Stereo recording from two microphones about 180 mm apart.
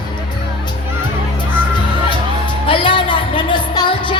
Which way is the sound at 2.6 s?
30° left (ahead or behind).